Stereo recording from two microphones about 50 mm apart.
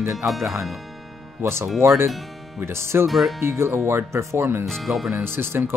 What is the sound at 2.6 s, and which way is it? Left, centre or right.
Speech, right.